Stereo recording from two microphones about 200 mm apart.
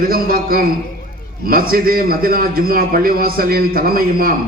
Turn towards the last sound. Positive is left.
turn(degrees=-45)  # may be behind; listen again after turning